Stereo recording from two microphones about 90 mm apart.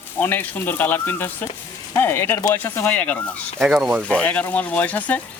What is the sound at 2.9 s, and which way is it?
Speech, 15° left (ahead or behind).